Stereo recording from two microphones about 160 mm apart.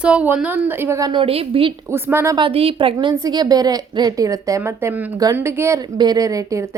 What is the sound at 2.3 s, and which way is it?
Speech, 35° right (ahead or behind).